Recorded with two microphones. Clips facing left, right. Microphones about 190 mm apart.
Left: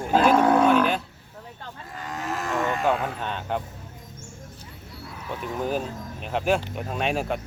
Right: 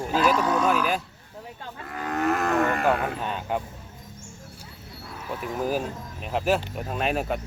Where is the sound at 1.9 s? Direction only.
60° right (ahead or behind).